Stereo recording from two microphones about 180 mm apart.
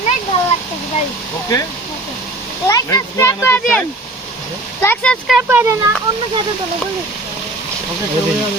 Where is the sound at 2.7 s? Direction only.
20° left (ahead or behind).